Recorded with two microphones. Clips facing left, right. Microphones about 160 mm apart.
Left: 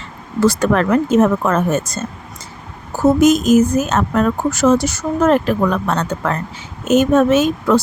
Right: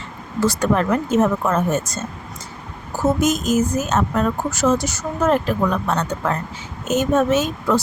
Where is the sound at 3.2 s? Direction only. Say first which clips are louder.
Left 7 dB; 75° left (ahead or behind).